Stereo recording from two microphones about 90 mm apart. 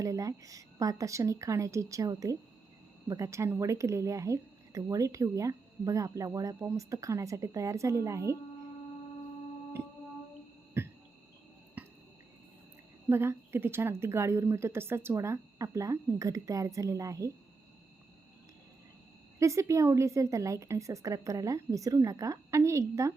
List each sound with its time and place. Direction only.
0.0 s a woman's voice: 35° right (ahead or behind)
10.8 s cricket: 25° right (ahead or behind)
11.8 s a sound: 15° right (ahead or behind)
13.1 s a woman's voice: 25° right (ahead or behind)
19.4 s a woman's voice: 35° right (ahead or behind)